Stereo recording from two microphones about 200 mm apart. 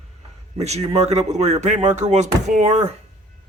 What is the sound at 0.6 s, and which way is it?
Speech, 35° right (ahead or behind).